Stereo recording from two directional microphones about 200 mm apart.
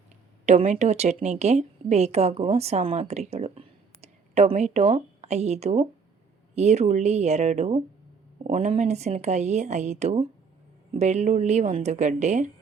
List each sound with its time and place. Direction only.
0.4 s a woman's voice: 30° right (ahead or behind)